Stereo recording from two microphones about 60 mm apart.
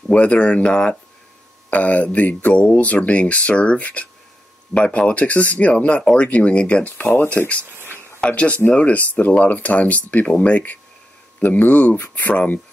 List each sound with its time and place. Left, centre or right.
0.1 s speech: left
7.6 s a sound: right
8.2 s speech: left